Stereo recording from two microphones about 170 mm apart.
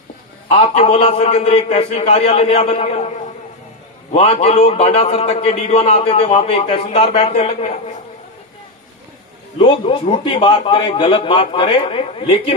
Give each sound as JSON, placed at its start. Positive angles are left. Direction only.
{"t": 0.5, "sound": "a man's voice", "side_deg": 40}
{"t": 4.1, "sound": "a man's voice", "side_deg": 40}
{"t": 9.6, "sound": "a man's voice", "side_deg": 30}